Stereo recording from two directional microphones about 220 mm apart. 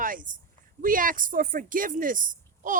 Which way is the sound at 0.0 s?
40° right (ahead or behind).